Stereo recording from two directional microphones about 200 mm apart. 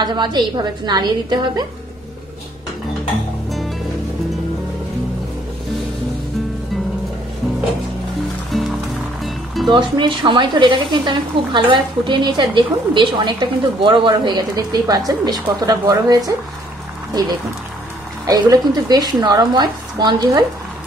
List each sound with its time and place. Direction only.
0.0 s speech: 20° right (ahead or behind)
8.5 s music: centre (ahead or behind)
9.7 s speech: 25° right (ahead or behind)
18.2 s speech: 20° right (ahead or behind)